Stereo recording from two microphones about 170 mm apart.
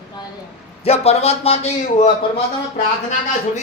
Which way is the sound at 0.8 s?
35° left (ahead or behind).